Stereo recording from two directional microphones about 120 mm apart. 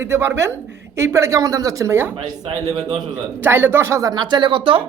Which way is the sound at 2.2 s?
35° right (ahead or behind).